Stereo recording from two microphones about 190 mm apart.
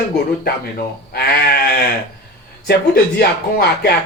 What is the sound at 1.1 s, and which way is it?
Speech, 55° left (ahead or behind).